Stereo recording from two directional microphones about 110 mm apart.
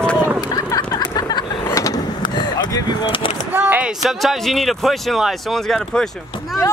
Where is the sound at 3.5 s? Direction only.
15° right (ahead or behind).